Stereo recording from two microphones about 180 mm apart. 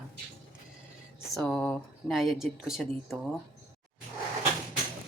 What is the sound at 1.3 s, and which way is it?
Speech, 5° left (ahead or behind).